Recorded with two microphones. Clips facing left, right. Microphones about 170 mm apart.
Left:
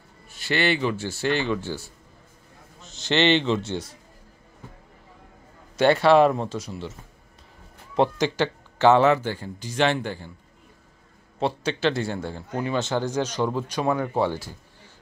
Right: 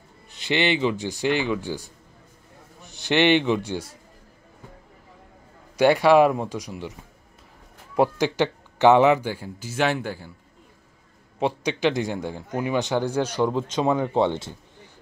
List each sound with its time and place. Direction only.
0.3 s a man's voice: 20° right (ahead or behind)
5.8 s a man's voice: 10° right (ahead or behind)
7.9 s a man's voice: 10° right (ahead or behind)
11.3 s a man's voice: 15° right (ahead or behind)